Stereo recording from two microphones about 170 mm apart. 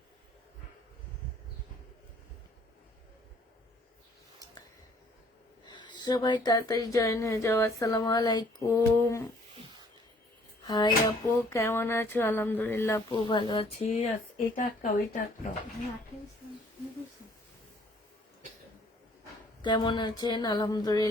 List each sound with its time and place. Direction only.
5.6 s speech: 25° left (ahead or behind)
10.7 s a sound: 25° left (ahead or behind)
13.1 s speech: 30° left (ahead or behind); by 15.2 s 50° left (ahead or behind)
19.6 s speech: 30° left (ahead or behind)